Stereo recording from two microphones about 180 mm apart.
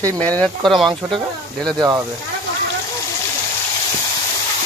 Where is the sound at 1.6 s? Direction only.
20° right (ahead or behind).